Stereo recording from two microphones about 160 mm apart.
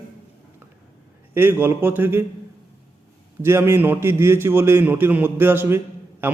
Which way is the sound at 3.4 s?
15° right (ahead or behind).